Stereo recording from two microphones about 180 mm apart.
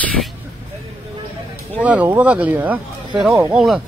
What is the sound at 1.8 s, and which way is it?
Speech, 10° right (ahead or behind).